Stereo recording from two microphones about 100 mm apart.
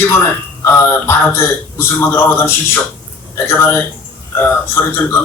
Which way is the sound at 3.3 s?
25° left (ahead or behind).